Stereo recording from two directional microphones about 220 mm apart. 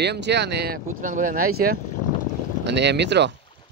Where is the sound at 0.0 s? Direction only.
50° right (ahead or behind).